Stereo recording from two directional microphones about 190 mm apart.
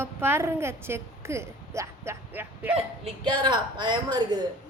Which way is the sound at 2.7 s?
30° right (ahead or behind).